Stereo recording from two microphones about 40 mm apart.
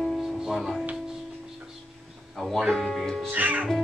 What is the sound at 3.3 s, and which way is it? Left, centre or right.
Speech, right.